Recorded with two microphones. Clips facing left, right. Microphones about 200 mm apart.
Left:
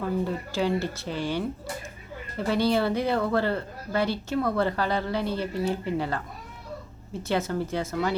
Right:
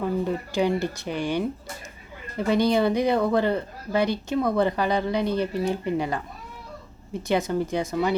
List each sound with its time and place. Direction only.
0.0 s speech: 15° right (ahead or behind)
2.5 s speech: 15° right (ahead or behind)